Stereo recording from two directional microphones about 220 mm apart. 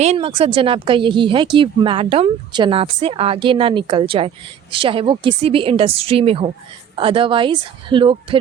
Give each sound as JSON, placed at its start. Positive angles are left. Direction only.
{"t": 0.0, "sound": "speech", "side_deg": -30}